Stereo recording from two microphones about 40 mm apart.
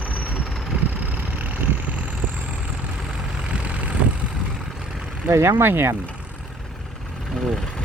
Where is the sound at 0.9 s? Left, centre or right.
Right.